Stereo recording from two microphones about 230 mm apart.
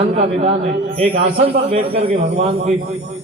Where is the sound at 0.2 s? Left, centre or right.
Right.